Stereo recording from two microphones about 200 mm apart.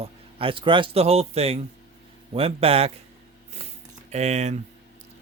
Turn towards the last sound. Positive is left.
turn(degrees=-35)  # may be behind; listen again after turning